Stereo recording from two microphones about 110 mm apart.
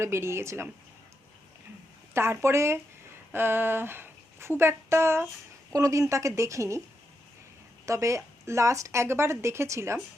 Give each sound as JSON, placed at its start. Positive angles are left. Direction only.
{"t": 0.0, "sound": "speech", "side_deg": -25}
{"t": 2.1, "sound": "speech", "side_deg": -20}
{"t": 7.9, "sound": "speech", "side_deg": -30}